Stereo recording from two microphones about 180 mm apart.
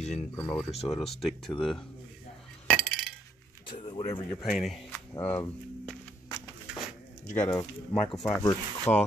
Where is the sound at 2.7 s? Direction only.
10° left (ahead or behind).